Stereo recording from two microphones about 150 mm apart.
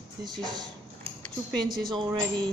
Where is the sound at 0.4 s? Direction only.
30° right (ahead or behind).